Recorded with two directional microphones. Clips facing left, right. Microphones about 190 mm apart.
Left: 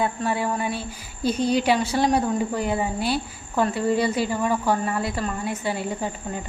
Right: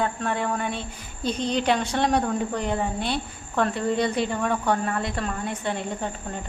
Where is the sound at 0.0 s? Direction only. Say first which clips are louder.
Left 2 dB; 5° left (ahead or behind).